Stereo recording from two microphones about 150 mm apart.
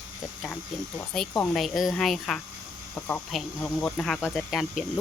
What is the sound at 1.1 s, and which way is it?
Speech, 5° left (ahead or behind).